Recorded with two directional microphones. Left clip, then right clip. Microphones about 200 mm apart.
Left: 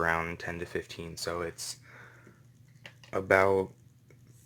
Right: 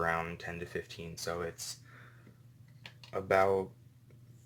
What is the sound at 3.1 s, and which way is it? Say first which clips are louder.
Speech: left 4 dB; 35° left (ahead or behind).